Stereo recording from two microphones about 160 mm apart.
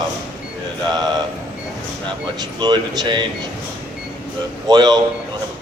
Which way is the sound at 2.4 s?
25° right (ahead or behind).